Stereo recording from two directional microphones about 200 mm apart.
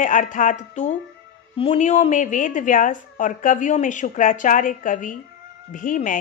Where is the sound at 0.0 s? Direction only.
40° left (ahead or behind).